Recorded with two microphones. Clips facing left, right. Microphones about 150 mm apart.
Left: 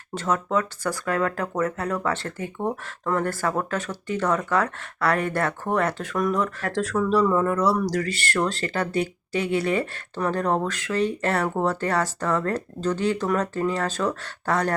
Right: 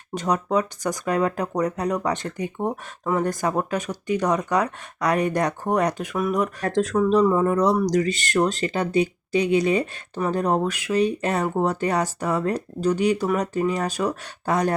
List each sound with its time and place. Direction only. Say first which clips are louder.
0.1 s speech: right 2 dB; 15° right (ahead or behind)